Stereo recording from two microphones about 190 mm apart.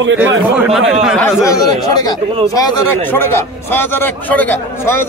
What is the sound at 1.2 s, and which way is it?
A man's voice, 15° left (ahead or behind).